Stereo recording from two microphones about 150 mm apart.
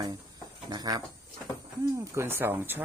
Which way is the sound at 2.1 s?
15° right (ahead or behind).